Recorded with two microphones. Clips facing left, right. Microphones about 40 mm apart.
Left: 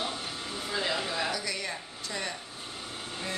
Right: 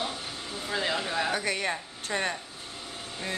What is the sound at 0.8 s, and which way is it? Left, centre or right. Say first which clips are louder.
Speech: right 2 dB; centre.